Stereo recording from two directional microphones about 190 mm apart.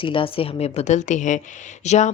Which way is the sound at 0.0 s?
25° left (ahead or behind).